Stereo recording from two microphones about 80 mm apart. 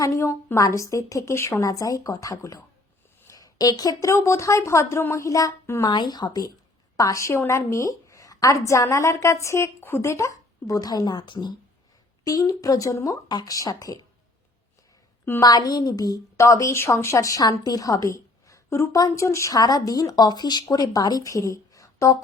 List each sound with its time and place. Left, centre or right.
0.0 s a woman's voice: left
3.2 s a sound: left
4.2 s a woman's voice: left
5.8 s a woman's voice: left
6.9 s a woman's voice: left
12.2 s speech: left
13.2 s speech: left
15.4 s a woman's voice: left
17.4 s a woman's voice: left
19.5 s speech: left